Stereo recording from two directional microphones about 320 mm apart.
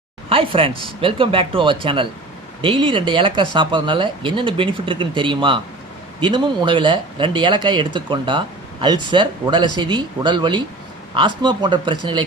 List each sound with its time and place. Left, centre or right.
0.3 s speech: centre